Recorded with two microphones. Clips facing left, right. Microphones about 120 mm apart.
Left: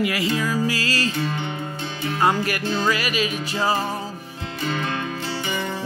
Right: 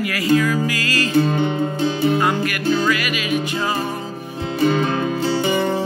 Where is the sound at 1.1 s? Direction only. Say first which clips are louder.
Right 9 dB; 40° right (ahead or behind).